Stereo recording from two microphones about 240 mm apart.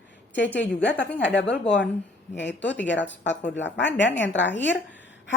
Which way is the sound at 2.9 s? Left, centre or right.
Left.